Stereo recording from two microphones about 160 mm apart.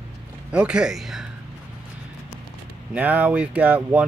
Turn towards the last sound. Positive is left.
turn(degrees=-10)  # may be behind; listen again after turning